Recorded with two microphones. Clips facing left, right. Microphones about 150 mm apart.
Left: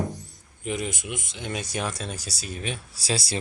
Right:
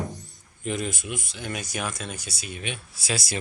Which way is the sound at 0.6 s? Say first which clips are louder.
Even; 15° left (ahead or behind).